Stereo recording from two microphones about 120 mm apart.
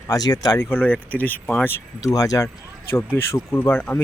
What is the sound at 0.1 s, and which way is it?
Speech, 35° left (ahead or behind).